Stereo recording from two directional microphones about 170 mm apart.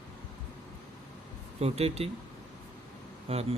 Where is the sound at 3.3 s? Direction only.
35° right (ahead or behind).